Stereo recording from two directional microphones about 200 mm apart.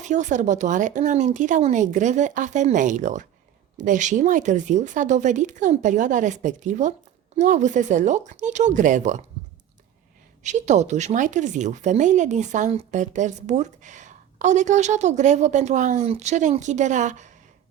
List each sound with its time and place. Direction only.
0.0 s speech: 35° right (ahead or behind)
10.4 s speech: 35° right (ahead or behind)